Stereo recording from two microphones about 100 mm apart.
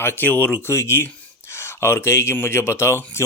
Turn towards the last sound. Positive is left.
turn(degrees=25)  # may be behind; listen again after turning